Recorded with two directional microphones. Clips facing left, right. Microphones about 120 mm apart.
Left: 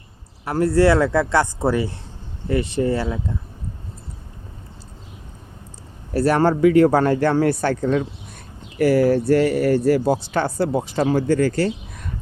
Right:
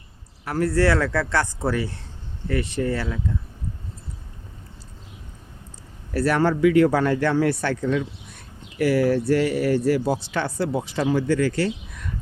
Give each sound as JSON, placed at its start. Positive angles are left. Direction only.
{"t": 0.4, "sound": "speech", "side_deg": 25}
{"t": 6.1, "sound": "speech", "side_deg": 35}